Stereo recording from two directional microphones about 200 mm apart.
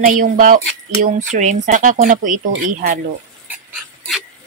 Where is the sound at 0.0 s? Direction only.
40° right (ahead or behind).